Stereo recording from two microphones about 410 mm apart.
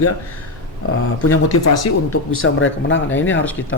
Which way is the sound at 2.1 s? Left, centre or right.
Left.